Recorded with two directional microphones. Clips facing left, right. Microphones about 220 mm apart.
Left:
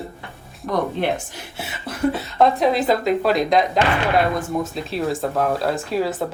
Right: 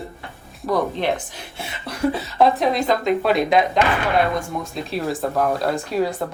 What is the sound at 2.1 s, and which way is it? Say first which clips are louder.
Speech: even; centre (ahead or behind).